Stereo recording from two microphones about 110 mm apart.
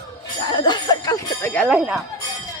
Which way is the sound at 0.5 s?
40° left (ahead or behind).